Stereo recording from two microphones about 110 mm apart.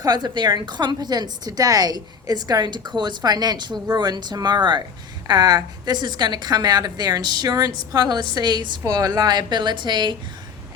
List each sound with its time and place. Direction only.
0.0 s a woman's voice: 40° right (ahead or behind)